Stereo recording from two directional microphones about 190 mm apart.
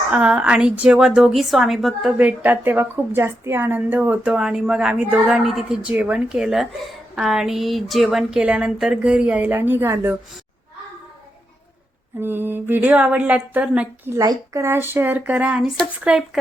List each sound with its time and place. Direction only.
0.1 s a woman's voice: 5° right (ahead or behind)
12.2 s a woman's voice: 10° right (ahead or behind)